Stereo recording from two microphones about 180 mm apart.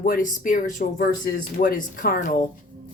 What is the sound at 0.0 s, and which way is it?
Speech, 50° left (ahead or behind).